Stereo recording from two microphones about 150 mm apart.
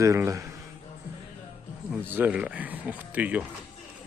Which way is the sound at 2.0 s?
15° right (ahead or behind).